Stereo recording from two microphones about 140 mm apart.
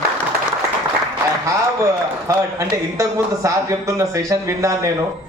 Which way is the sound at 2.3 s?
20° right (ahead or behind).